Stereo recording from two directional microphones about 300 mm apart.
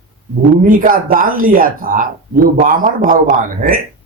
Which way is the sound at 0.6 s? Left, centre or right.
Right.